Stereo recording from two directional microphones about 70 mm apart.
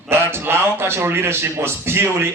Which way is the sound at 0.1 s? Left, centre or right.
Right.